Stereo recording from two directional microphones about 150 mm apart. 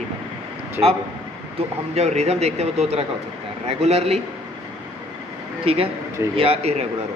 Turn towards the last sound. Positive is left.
turn(degrees=-40)  # may be behind; listen again after turning